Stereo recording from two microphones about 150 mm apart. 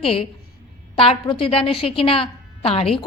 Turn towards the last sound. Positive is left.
turn(degrees=40)  # may be behind; listen again after turning